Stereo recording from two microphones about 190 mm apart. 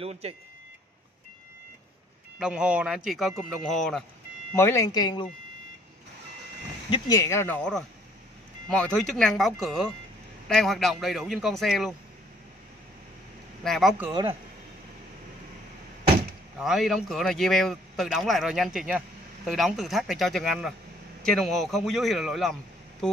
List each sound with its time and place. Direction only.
0.0 s speech: 30° right (ahead or behind)
2.3 s speech: 5° right (ahead or behind)
4.6 s speech: 15° left (ahead or behind)
7.2 s speech: 15° left (ahead or behind)
13.7 s speech: centre (ahead or behind)
16.5 s a man's voice: centre (ahead or behind)